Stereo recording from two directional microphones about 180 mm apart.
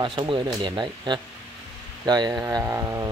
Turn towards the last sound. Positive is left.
turn(degrees=-15)  # may be behind; listen again after turning